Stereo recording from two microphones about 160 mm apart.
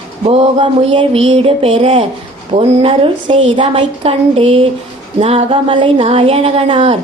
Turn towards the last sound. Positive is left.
turn(degrees=-35)  # may be behind; listen again after turning